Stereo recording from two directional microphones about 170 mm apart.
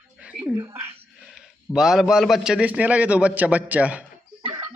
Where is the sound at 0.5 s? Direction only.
15° right (ahead or behind).